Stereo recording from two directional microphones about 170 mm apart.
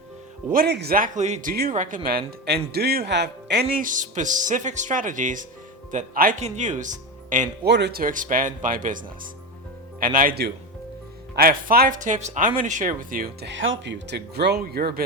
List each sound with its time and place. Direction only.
0.5 s speech: 70° right (ahead or behind)
1.7 s speech: 50° right (ahead or behind)
2.0 s speech: 65° right (ahead or behind)
3.8 s speech: 50° right (ahead or behind)
7.6 s speech: 80° right